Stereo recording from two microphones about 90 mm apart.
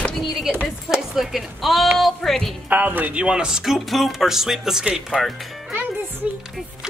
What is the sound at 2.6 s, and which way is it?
Speech, 20° right (ahead or behind).